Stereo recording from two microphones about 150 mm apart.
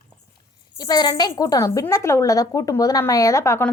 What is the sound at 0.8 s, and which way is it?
Speech, 25° left (ahead or behind).